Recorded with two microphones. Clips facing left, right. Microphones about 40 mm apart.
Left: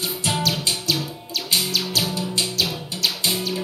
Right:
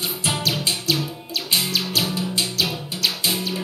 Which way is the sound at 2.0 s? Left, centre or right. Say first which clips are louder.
Even; centre.